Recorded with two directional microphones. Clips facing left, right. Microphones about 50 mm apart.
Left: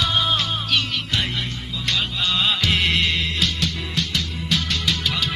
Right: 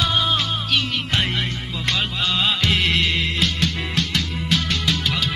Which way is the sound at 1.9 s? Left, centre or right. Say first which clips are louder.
Right 1 dB; centre.